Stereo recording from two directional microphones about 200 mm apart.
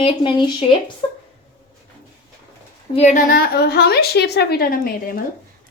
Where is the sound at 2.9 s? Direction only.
35° left (ahead or behind).